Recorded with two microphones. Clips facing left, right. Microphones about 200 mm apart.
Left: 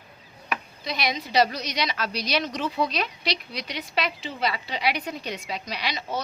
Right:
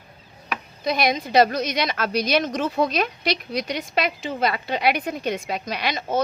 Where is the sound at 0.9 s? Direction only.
50° right (ahead or behind).